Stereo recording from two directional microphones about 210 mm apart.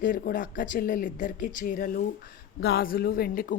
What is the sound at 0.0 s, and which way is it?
Speech, 40° left (ahead or behind).